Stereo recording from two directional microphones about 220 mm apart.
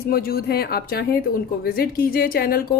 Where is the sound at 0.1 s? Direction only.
45° left (ahead or behind).